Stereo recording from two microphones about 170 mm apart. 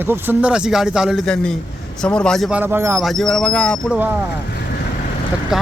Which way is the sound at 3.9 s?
10° right (ahead or behind).